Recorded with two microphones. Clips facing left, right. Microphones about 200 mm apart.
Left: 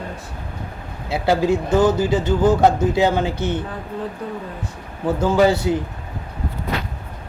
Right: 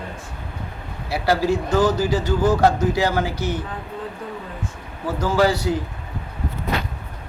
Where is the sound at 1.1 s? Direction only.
20° left (ahead or behind).